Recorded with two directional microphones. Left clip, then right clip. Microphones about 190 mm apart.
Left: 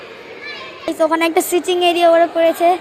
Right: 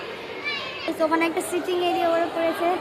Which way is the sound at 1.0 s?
30° left (ahead or behind).